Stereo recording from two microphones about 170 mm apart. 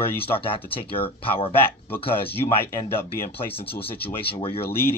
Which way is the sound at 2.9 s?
35° left (ahead or behind).